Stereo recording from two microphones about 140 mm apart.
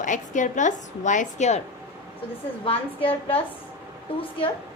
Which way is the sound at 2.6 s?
40° left (ahead or behind).